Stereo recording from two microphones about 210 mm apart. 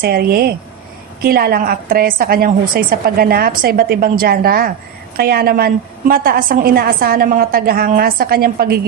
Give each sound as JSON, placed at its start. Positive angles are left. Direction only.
{"t": 0.0, "sound": "a woman's voice", "side_deg": -45}